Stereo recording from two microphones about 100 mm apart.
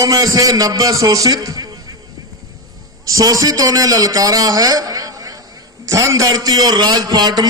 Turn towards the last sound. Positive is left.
turn(degrees=-45)  # may be behind; listen again after turning